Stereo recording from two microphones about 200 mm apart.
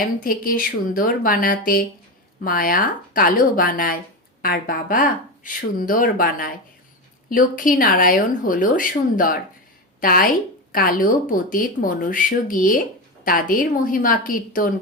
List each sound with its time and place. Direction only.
0.2 s a woman's voice: 45° left (ahead or behind)